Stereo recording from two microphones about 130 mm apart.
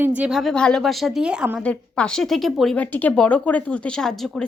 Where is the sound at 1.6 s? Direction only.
10° left (ahead or behind).